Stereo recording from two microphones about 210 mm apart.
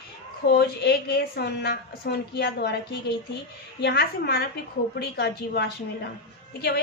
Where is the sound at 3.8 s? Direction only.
50° left (ahead or behind).